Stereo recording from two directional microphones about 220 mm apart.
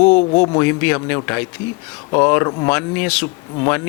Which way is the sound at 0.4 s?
15° left (ahead or behind).